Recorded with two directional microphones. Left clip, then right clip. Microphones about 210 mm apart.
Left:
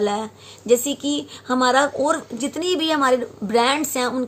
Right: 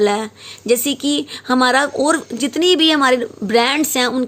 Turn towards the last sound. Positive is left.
turn(degrees=-40)  # may be behind; listen again after turning